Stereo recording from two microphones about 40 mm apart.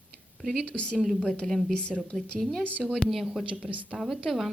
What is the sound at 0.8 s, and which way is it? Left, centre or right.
Speech, left.